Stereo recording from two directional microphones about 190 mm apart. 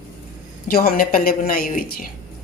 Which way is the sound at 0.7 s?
50° left (ahead or behind).